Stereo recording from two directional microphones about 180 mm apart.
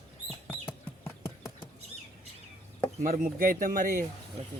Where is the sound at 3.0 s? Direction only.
50° right (ahead or behind).